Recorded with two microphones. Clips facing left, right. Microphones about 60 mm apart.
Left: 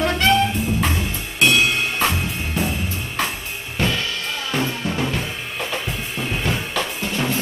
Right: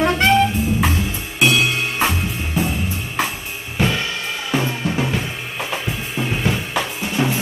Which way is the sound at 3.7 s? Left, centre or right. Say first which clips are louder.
Right 2 dB; centre.